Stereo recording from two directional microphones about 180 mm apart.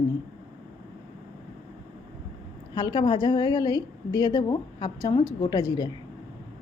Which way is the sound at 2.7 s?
25° left (ahead or behind).